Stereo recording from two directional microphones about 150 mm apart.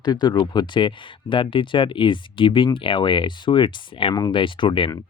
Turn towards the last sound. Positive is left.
turn(degrees=35)  # may be behind; listen again after turning